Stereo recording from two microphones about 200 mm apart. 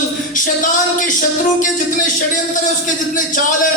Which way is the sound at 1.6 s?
40° left (ahead or behind).